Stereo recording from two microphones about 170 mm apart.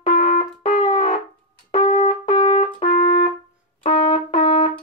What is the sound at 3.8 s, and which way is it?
Brass instrument, 30° left (ahead or behind).